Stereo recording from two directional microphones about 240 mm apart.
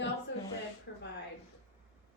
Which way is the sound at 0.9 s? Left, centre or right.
Left.